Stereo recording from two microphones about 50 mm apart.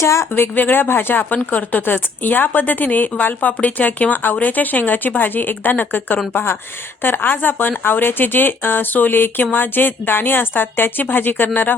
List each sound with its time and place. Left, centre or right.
0.0 s speech: left
0.3 s speech: left